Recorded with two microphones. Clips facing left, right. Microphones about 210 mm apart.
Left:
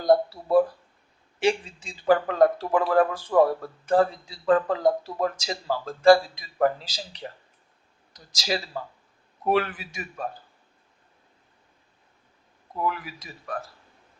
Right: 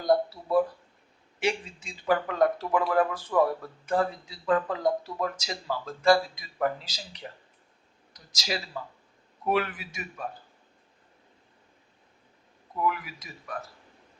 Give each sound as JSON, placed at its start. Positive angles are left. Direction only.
{"t": 0.0, "sound": "a sound", "side_deg": 30}
{"t": 1.4, "sound": "speech", "side_deg": 30}
{"t": 12.8, "sound": "speech", "side_deg": 35}